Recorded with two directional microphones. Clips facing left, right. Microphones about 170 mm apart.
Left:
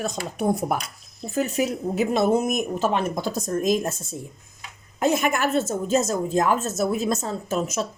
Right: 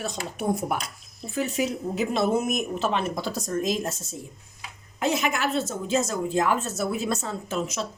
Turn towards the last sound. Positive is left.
turn(degrees=45)  # may be behind; listen again after turning